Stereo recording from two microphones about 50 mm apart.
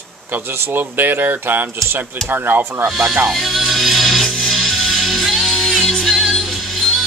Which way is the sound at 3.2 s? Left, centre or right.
Centre.